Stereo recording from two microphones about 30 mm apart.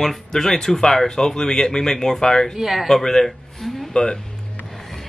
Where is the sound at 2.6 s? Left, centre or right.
Centre.